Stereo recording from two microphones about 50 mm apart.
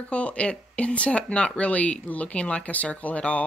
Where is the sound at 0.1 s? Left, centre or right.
Left.